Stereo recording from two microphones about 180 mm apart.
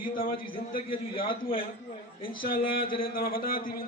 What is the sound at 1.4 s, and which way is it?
A man's voice, 50° left (ahead or behind).